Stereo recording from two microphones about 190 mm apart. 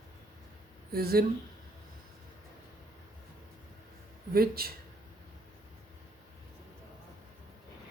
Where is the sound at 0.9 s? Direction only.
55° right (ahead or behind).